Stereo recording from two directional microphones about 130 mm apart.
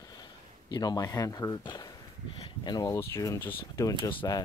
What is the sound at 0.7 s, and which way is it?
Speech, 30° left (ahead or behind).